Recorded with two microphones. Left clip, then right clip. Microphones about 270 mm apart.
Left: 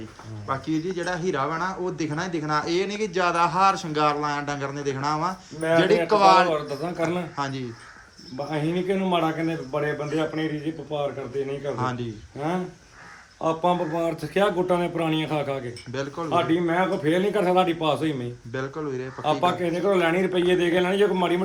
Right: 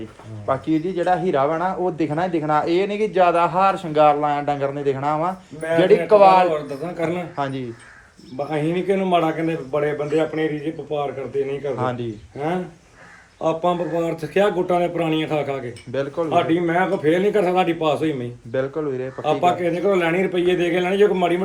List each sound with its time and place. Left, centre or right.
0.4 s speech: centre
6.5 s a man's voice: centre
7.3 s speech: centre